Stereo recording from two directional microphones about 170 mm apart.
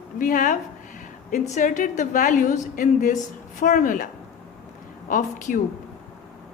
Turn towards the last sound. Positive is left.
turn(degrees=50)  # may be behind; listen again after turning